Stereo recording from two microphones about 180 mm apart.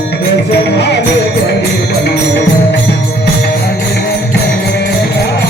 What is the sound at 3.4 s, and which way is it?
Music, 60° left (ahead or behind).